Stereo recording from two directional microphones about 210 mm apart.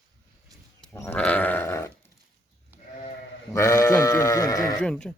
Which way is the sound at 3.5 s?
15° left (ahead or behind).